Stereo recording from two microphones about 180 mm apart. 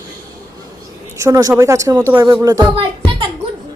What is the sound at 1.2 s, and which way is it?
Speech, 15° right (ahead or behind).